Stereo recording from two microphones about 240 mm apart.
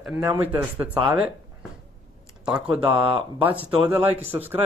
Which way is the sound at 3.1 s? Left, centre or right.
Right.